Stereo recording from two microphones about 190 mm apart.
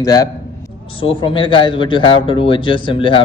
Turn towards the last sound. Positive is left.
turn(degrees=25)  # may be behind; listen again after turning